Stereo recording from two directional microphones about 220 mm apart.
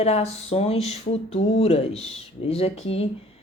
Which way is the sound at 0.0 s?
30° left (ahead or behind).